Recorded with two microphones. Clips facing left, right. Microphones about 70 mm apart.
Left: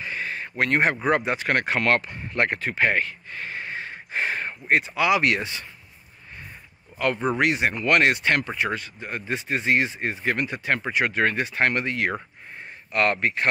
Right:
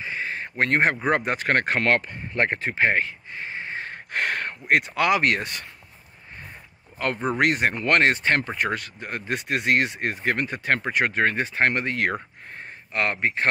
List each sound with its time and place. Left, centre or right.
0.0 s a sound: right
1.0 s speech: right
4.1 s speech: right
7.0 s speech: right
8.5 s speech: right
11.2 s speech: right
12.9 s speech: right